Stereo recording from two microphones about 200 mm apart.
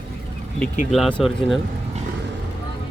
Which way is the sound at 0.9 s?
5° left (ahead or behind).